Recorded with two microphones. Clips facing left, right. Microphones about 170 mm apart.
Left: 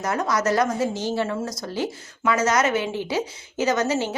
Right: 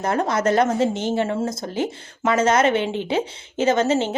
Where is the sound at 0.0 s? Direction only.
30° right (ahead or behind).